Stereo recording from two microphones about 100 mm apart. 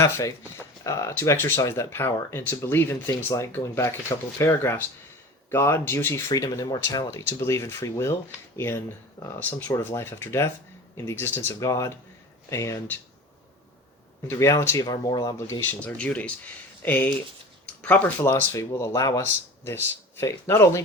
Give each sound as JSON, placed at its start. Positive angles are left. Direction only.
{"t": 0.0, "sound": "speech", "side_deg": 35}
{"t": 6.3, "sound": "speech", "side_deg": 35}
{"t": 14.3, "sound": "speech", "side_deg": 30}
{"t": 14.8, "sound": "speech", "side_deg": 40}
{"t": 15.8, "sound": "speech", "side_deg": 15}
{"t": 18.5, "sound": "speech", "side_deg": 35}
{"t": 19.2, "sound": "speech", "side_deg": 20}